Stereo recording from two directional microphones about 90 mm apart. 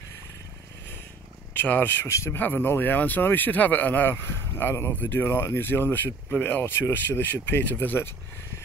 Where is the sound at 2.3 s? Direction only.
20° left (ahead or behind).